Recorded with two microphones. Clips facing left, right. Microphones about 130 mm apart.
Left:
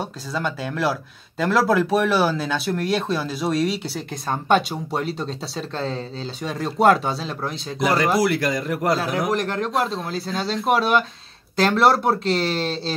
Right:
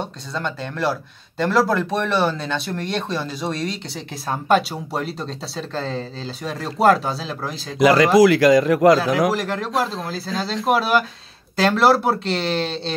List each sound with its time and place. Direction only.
0.0 s speech: 5° left (ahead or behind)
7.8 s a man's voice: 90° right
9.3 s speech: centre (ahead or behind)